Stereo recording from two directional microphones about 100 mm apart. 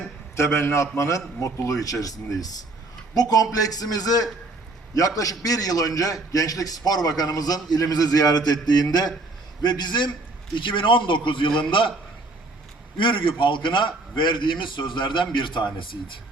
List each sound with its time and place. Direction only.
0.3 s a man's voice: 30° left (ahead or behind); by 11.9 s 55° left (ahead or behind)
13.0 s a man's voice: 55° left (ahead or behind)